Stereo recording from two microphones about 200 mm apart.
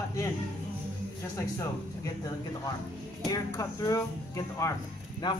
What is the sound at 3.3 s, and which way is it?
Speech, 15° left (ahead or behind).